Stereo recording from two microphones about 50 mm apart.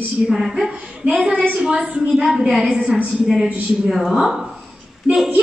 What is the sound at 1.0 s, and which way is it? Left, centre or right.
A woman's voice, right.